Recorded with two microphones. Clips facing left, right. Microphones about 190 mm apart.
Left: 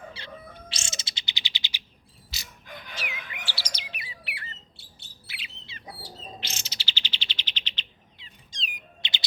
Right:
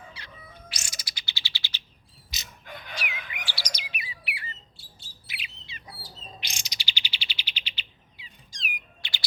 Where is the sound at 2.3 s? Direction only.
15° right (ahead or behind).